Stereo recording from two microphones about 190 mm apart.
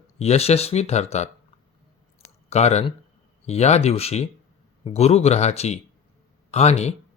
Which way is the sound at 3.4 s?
35° left (ahead or behind).